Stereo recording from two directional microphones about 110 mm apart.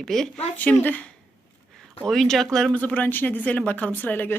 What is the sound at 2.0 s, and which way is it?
Speech, 5° left (ahead or behind).